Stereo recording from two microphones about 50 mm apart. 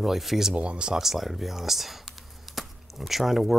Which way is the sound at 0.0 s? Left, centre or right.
Centre.